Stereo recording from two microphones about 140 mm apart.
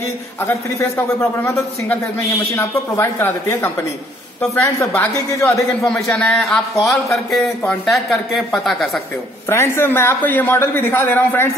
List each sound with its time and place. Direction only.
0.4 s a man's voice: 20° left (ahead or behind)
2.5 s a man's voice: 20° left (ahead or behind)
5.7 s a man's voice: 5° left (ahead or behind)
9.5 s a man's voice: 15° left (ahead or behind)